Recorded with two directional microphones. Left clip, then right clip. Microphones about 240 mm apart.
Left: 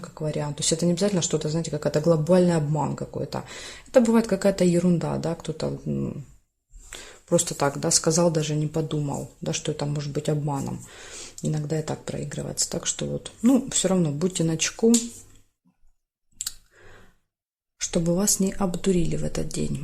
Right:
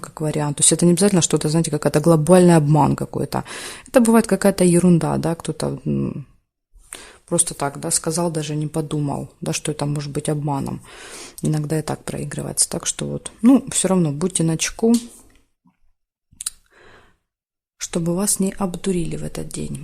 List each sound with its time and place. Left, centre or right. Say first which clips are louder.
0.0 s speech: right 6 dB; right
6.9 s speech: even; right
16.4 s clicking: right 2 dB; right
17.7 s speech: right 1 dB; right